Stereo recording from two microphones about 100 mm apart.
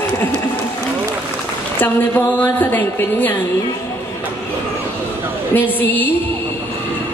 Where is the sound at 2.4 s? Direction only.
20° left (ahead or behind).